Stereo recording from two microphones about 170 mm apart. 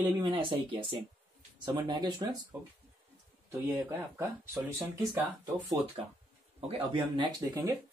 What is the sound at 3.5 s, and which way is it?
Speech, 10° right (ahead or behind).